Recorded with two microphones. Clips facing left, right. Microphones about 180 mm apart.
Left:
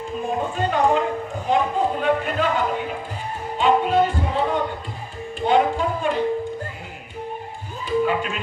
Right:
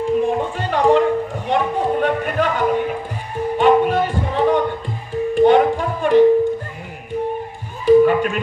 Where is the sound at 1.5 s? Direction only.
65° right (ahead or behind).